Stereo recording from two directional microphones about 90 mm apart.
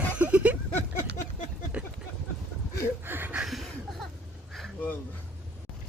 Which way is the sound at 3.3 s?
5° right (ahead or behind).